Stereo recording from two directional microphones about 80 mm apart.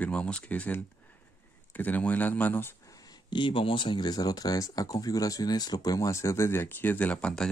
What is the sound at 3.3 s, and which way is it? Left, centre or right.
Speech, left.